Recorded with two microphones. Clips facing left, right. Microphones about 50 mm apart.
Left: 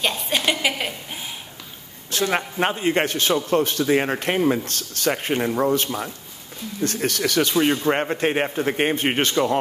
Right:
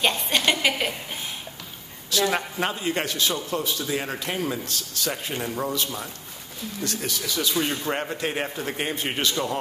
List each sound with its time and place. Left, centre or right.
0.0 s a sound: centre
2.0 s a woman's voice: left
3.8 s speech: left
6.8 s speech: left
7.5 s speech: left